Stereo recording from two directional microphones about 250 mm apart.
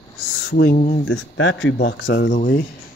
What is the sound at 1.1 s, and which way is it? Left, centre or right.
Speech, left.